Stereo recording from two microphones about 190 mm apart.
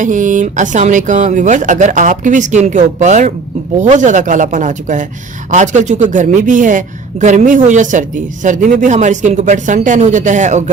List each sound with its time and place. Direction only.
0.0 s speech: 40° right (ahead or behind)